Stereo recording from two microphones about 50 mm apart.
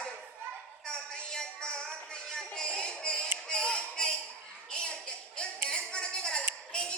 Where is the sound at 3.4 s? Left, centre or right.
Centre.